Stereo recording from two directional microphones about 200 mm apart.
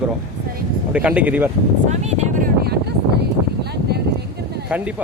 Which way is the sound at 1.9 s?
35° right (ahead or behind).